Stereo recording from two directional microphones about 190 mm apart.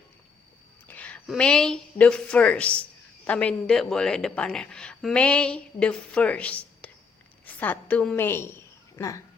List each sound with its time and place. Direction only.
0.9 s a woman's voice: 5° left (ahead or behind)